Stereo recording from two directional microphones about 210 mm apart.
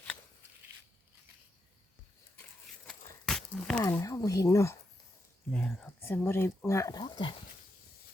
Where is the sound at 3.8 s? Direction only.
15° left (ahead or behind).